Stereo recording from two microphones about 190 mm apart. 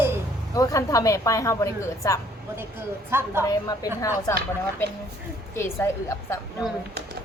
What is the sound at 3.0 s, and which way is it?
Speech, 10° right (ahead or behind).